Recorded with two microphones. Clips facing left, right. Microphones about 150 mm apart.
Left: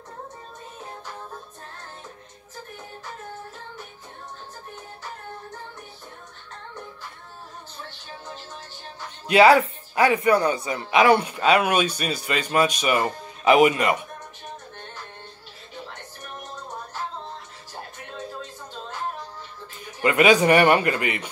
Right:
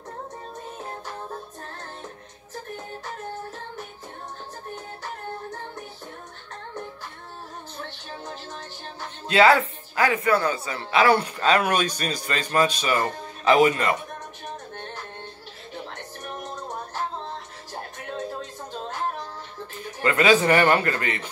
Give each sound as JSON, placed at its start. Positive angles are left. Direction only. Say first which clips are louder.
{"t": 9.3, "sound": "speech", "louder": "left 3 dB", "side_deg": 20}
{"t": 20.0, "sound": "speech", "louder": "left 2 dB", "side_deg": 15}